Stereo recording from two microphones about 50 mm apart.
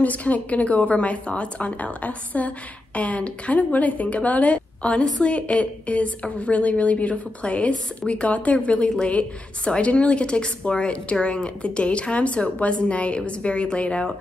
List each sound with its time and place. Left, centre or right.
0.0 s a woman's voice: left
8.6 s a woman's voice: centre